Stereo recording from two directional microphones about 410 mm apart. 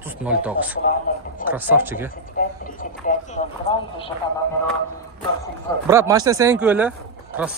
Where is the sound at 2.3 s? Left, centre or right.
Centre.